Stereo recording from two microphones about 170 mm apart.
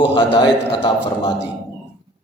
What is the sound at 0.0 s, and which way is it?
Speech, 30° left (ahead or behind).